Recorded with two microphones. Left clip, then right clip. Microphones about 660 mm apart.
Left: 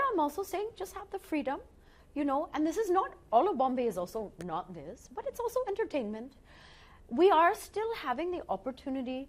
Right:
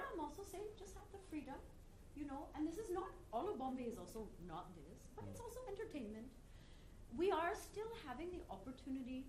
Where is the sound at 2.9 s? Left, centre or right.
Left.